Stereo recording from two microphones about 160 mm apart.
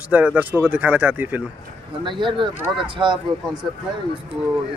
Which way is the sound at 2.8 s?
30° right (ahead or behind).